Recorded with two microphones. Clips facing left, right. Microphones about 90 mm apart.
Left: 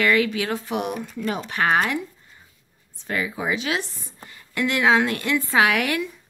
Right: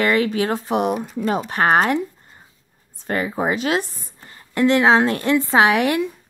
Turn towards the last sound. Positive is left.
turn(degrees=-30)  # may be behind; listen again after turning